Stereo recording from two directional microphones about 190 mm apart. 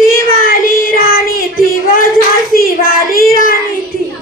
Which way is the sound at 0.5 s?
50° left (ahead or behind).